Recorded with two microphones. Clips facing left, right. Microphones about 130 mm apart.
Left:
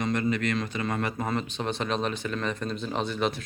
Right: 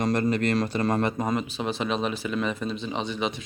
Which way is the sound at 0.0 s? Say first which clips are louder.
Right 3 dB; 40° right (ahead or behind).